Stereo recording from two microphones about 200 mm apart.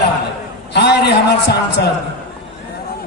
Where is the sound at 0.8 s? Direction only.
55° left (ahead or behind).